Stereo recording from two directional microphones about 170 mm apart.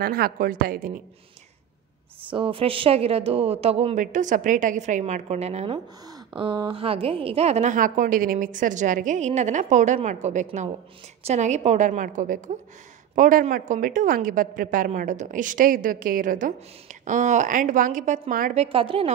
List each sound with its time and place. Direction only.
0.0 s a woman's voice: 60° right (ahead or behind)
2.2 s speech: 30° right (ahead or behind)
6.3 s a woman's voice: 25° right (ahead or behind); by 18.5 s 50° right (ahead or behind)
18.5 s speech: 35° right (ahead or behind)